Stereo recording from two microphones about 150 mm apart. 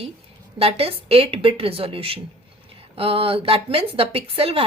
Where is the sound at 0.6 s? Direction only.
40° right (ahead or behind).